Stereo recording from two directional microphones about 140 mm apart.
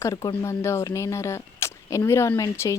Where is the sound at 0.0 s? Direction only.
25° left (ahead or behind).